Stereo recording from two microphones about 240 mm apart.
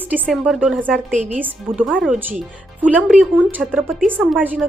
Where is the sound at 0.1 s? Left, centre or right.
Centre.